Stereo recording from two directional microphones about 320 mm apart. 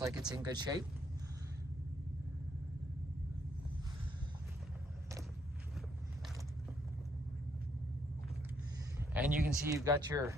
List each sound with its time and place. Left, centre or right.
0.0 s speech: centre
9.0 s speech: centre